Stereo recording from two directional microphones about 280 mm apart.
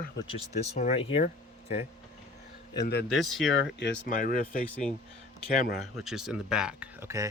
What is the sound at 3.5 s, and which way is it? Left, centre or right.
Speech, left.